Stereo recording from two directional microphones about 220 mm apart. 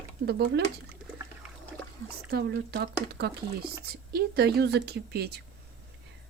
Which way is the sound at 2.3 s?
50° right (ahead or behind).